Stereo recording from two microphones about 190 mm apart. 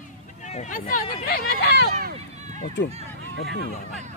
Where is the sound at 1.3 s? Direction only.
60° left (ahead or behind).